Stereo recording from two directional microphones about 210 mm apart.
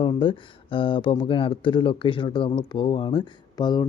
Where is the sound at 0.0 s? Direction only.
25° left (ahead or behind).